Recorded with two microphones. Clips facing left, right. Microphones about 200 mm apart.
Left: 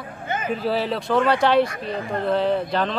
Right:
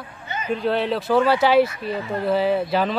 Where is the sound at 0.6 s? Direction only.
Centre (ahead or behind).